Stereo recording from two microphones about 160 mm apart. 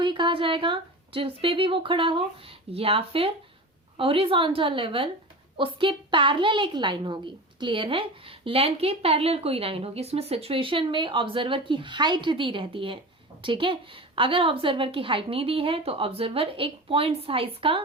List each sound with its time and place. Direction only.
0.0 s a woman's voice: 30° right (ahead or behind)